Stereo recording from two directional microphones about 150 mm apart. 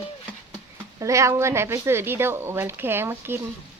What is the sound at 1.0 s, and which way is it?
Speech, 20° right (ahead or behind).